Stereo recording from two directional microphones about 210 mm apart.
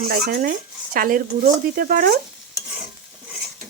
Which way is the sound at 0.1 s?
45° right (ahead or behind).